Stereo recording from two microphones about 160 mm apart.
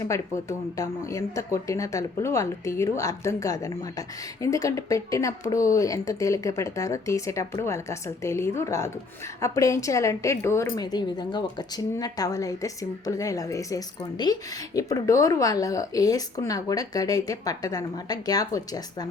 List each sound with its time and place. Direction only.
0.0 s speech: 20° left (ahead or behind)